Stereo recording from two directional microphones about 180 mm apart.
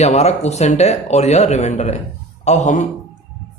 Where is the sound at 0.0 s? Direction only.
35° left (ahead or behind).